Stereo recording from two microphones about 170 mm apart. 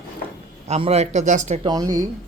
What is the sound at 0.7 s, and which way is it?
Speech, 40° right (ahead or behind).